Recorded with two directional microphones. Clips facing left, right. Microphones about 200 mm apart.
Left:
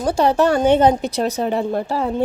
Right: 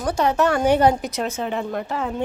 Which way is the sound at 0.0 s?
30° left (ahead or behind).